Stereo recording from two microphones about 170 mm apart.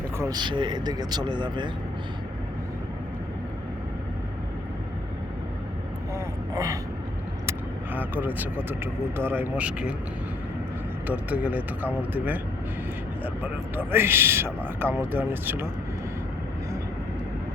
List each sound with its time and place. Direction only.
0.2 s speech: 25° right (ahead or behind)
6.1 s vehicle: 15° right (ahead or behind)
7.9 s speech: 10° right (ahead or behind)
11.1 s speech: 10° right (ahead or behind)